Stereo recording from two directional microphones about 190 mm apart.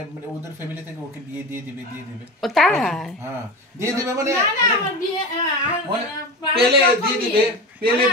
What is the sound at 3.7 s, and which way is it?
Speech, 15° right (ahead or behind).